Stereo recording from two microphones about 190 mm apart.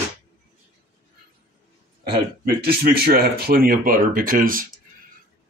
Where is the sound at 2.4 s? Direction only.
55° right (ahead or behind).